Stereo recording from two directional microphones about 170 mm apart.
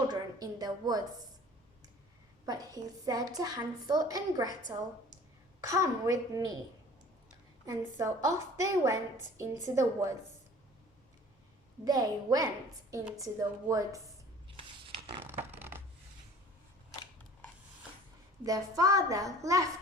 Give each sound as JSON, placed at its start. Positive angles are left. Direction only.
{"t": 0.1, "sound": "a woman's voice", "side_deg": -20}
{"t": 2.5, "sound": "a woman's voice", "side_deg": -20}
{"t": 5.5, "sound": "a woman's voice", "side_deg": -20}
{"t": 7.6, "sound": "a woman's voice", "side_deg": -20}
{"t": 11.9, "sound": "a woman's voice", "side_deg": -20}
{"t": 14.5, "sound": "a sound", "side_deg": -30}
{"t": 15.2, "sound": "a sound", "side_deg": -15}
{"t": 18.4, "sound": "a woman's voice", "side_deg": -20}